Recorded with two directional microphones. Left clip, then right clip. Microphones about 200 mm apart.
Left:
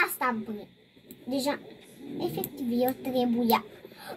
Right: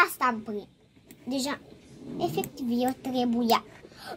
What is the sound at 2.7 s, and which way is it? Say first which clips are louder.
Speech: left 1 dB; 70° right (ahead or behind).